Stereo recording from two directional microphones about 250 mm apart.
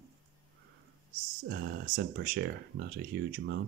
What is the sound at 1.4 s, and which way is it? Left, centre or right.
Speech, right.